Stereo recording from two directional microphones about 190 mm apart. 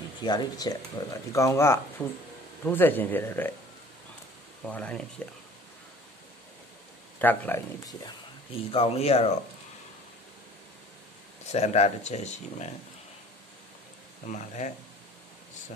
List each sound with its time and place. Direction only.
0.2 s speech: 20° left (ahead or behind)
4.6 s speech: 5° left (ahead or behind)
7.2 s speech: 10° left (ahead or behind)
8.7 s speech: 30° left (ahead or behind)
11.5 s speech: 35° left (ahead or behind)
14.3 s speech: 35° left (ahead or behind)